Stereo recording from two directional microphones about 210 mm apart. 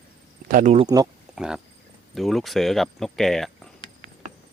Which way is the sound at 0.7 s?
20° right (ahead or behind).